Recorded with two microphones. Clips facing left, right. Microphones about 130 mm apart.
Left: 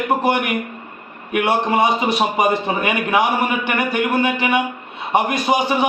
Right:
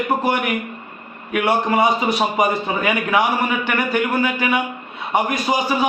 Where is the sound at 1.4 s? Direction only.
20° left (ahead or behind).